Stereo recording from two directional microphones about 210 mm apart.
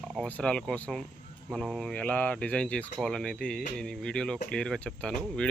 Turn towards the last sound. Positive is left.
turn(degrees=5)  # may be behind; listen again after turning